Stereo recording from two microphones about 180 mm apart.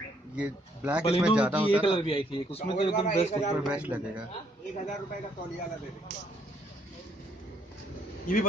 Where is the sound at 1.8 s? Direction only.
30° left (ahead or behind).